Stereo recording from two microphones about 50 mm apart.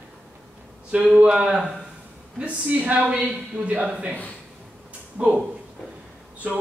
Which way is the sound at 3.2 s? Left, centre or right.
Right.